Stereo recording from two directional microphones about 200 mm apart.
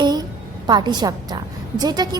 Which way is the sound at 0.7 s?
20° right (ahead or behind).